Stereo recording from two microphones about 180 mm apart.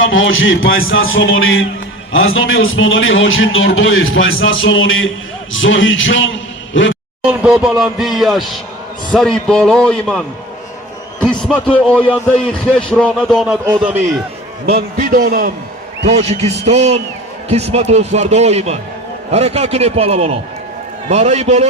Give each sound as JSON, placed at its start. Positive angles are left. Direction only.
{"t": 0.0, "sound": "a man's voice", "side_deg": 90}
{"t": 7.2, "sound": "a man's voice", "side_deg": -5}
{"t": 14.7, "sound": "a man's voice", "side_deg": -60}
{"t": 16.0, "sound": "a man's voice", "side_deg": -35}